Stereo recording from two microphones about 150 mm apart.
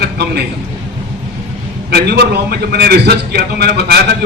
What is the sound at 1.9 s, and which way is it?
A man's voice, 90° right.